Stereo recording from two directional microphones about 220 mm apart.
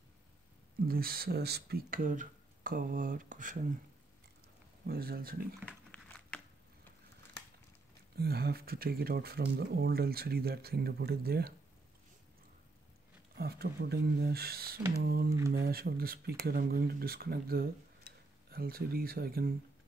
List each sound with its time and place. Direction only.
0.8 s speech: 40° right (ahead or behind)
4.8 s speech: 45° right (ahead or behind)
5.7 s a sound: 5° left (ahead or behind)
8.2 s speech: 45° right (ahead or behind)
13.4 s speech: 45° right (ahead or behind)